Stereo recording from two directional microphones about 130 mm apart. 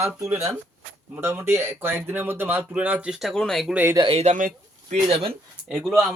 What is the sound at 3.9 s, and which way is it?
Speech, 40° right (ahead or behind).